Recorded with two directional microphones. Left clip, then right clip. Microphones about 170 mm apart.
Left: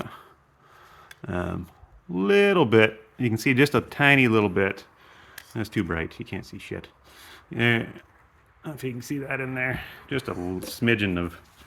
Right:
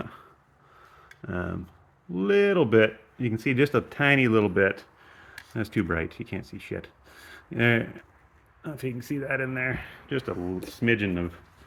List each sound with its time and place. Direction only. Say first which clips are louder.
1.2 s speech: left 2 dB; 20° left (ahead or behind)